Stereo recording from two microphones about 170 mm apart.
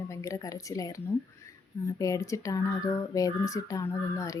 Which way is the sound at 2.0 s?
20° left (ahead or behind).